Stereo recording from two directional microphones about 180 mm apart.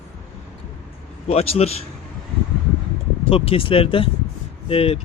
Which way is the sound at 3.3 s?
30° left (ahead or behind).